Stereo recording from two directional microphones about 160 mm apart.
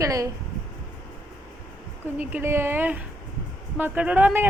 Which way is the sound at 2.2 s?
10° right (ahead or behind).